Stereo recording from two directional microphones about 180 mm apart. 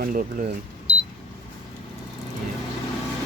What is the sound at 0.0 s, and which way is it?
Speech, 50° right (ahead or behind).